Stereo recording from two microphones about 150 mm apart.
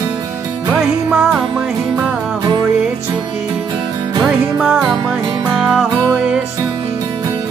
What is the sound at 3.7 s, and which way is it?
Music, 30° right (ahead or behind).